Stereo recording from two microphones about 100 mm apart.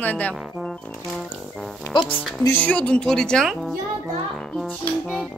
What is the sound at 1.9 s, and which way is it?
Speech, 50° left (ahead or behind).